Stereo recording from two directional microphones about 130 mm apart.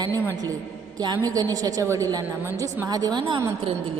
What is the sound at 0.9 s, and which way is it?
A woman's voice, 30° right (ahead or behind).